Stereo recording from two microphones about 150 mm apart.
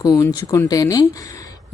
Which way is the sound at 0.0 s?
25° left (ahead or behind).